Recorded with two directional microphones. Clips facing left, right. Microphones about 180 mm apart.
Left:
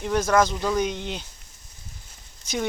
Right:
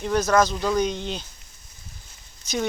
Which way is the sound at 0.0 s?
15° left (ahead or behind).